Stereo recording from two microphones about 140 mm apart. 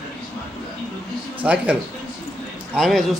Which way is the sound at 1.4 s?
10° right (ahead or behind).